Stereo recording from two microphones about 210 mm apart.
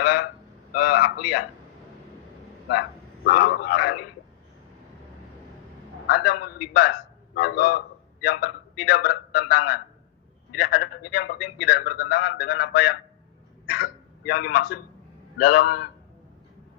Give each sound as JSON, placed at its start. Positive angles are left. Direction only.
{"t": 0.0, "sound": "a sound", "side_deg": 45}
{"t": 3.2, "sound": "speech", "side_deg": 50}
{"t": 6.1, "sound": "a man's voice", "side_deg": 45}